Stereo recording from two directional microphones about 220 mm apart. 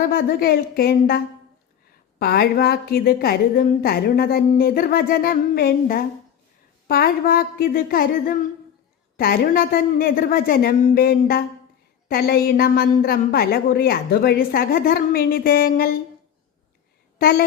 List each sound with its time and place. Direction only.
0.0 s a woman's voice: 45° left (ahead or behind)
9.1 s a woman's voice: 45° left (ahead or behind)
17.2 s a woman's voice: 45° left (ahead or behind)